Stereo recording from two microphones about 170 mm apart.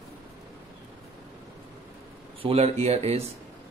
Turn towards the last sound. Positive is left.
turn(degrees=-40)  # may be behind; listen again after turning